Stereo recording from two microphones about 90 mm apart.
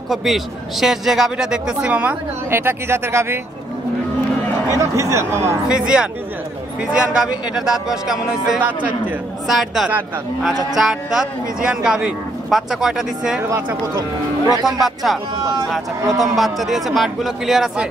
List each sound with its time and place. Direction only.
0.1 s speech: centre (ahead or behind)
2.6 s speech: 30° right (ahead or behind)
4.6 s speech: 35° right (ahead or behind)
5.7 s speech: 10° right (ahead or behind)
13.4 s speech: 25° right (ahead or behind)
14.6 s speech: 5° right (ahead or behind)
16.2 s speech: centre (ahead or behind)